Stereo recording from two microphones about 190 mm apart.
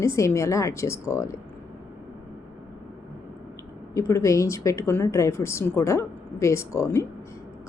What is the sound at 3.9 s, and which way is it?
Speech, 15° left (ahead or behind).